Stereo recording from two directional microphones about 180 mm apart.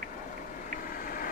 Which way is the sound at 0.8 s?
50° left (ahead or behind).